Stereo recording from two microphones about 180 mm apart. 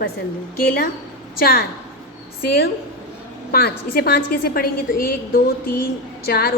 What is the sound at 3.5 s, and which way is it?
A woman's voice, 55° left (ahead or behind).